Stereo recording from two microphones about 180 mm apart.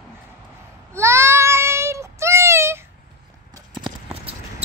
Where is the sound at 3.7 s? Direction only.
25° right (ahead or behind).